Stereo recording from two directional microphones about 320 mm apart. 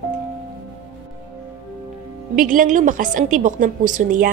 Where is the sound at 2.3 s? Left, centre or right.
Right.